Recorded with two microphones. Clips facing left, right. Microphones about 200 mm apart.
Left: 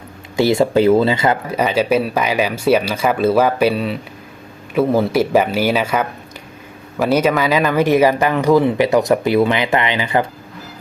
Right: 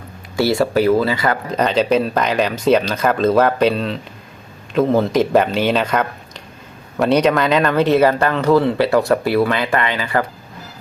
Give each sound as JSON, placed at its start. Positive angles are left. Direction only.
{"t": 0.3, "sound": "speech", "side_deg": 20}
{"t": 1.5, "sound": "speech", "side_deg": 10}